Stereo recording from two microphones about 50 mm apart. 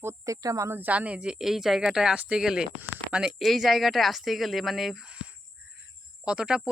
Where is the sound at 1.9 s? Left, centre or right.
Centre.